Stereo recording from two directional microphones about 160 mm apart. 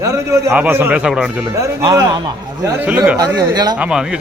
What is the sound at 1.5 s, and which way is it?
A man's voice, 20° right (ahead or behind).